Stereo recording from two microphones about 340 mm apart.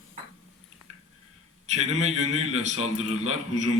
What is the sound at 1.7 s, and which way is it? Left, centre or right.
A man's voice, centre.